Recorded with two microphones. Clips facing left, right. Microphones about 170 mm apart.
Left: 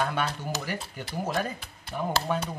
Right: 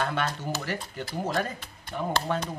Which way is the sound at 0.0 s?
10° left (ahead or behind).